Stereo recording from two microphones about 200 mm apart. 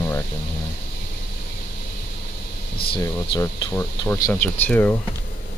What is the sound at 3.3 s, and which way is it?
Speech, 15° left (ahead or behind).